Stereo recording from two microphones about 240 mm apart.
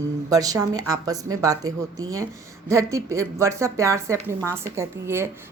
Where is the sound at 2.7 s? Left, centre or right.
Centre.